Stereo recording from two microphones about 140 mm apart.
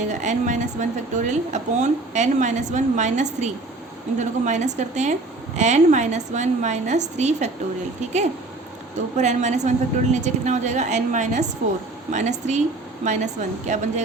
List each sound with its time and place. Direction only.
0.1 s speech: 60° right (ahead or behind)
9.1 s speech: 55° right (ahead or behind)